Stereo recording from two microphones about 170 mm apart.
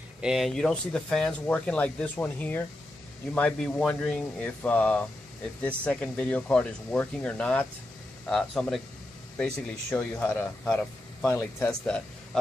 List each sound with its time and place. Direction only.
0.2 s speech: centre (ahead or behind)
9.8 s speech: 10° left (ahead or behind)